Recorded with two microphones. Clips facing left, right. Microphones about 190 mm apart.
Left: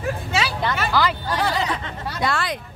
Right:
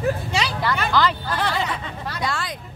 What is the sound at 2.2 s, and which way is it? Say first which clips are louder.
Speech: left 5 dB; 65° left (ahead or behind).